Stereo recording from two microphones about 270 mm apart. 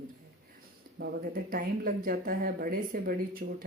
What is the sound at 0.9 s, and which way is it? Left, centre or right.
Speech, right.